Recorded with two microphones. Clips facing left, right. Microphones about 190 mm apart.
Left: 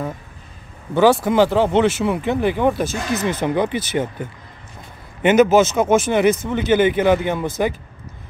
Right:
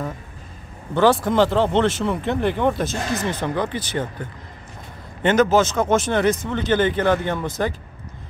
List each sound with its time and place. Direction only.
0.9 s speech: 5° left (ahead or behind)
3.3 s speech: 15° left (ahead or behind)
5.2 s speech: 10° left (ahead or behind)